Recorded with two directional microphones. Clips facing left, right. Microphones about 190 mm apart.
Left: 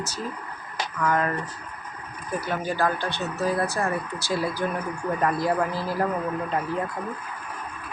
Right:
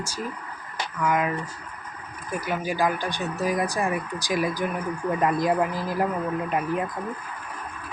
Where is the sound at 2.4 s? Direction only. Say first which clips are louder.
Even; 10° right (ahead or behind).